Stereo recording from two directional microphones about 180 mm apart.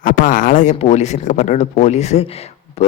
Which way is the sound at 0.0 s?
50° left (ahead or behind).